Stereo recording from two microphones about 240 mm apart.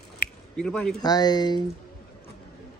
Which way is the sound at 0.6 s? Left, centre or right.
Centre.